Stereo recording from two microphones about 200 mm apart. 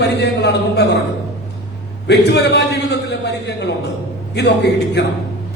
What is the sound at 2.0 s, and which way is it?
A man's voice, 55° left (ahead or behind).